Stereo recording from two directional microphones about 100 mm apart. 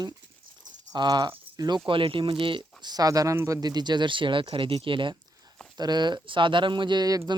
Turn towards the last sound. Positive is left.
turn(degrees=-40)  # may be behind; listen again after turning